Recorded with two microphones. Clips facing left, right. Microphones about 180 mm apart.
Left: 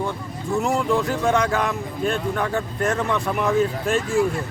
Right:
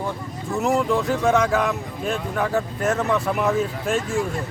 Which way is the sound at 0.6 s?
Centre (ahead or behind).